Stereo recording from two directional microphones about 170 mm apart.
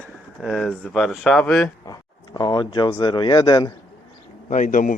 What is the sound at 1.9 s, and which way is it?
Speech, 25° left (ahead or behind).